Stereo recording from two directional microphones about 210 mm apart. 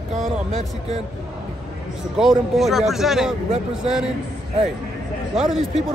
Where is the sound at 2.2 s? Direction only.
Centre (ahead or behind).